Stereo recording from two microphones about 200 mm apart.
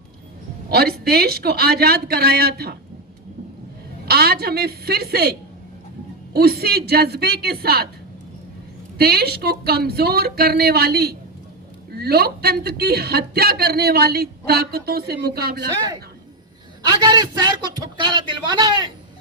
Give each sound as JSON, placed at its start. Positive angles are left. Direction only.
{"t": 0.7, "sound": "a woman's voice", "side_deg": -50}
{"t": 4.0, "sound": "a woman's voice", "side_deg": -50}
{"t": 9.0, "sound": "a woman's voice", "side_deg": -50}
{"t": 16.9, "sound": "speech", "side_deg": -20}